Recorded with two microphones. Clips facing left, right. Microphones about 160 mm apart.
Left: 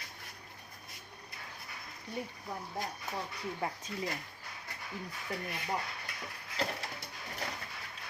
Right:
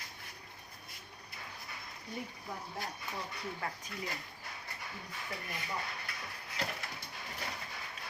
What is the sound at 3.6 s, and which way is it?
Speech, 20° left (ahead or behind).